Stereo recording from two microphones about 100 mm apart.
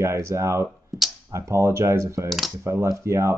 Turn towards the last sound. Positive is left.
turn(degrees=-30)  # may be behind; listen again after turning